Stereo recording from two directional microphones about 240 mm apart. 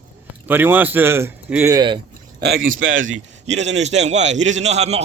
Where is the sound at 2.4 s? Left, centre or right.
Right.